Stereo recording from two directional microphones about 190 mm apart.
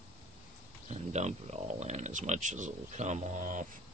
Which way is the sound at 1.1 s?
35° right (ahead or behind).